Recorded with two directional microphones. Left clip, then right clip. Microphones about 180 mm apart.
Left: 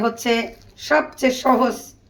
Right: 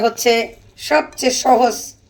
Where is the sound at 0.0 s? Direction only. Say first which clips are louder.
Right 5 dB; 40° left (ahead or behind).